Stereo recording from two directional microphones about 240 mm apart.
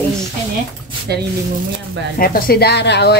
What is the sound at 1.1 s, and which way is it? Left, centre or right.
Speech, right.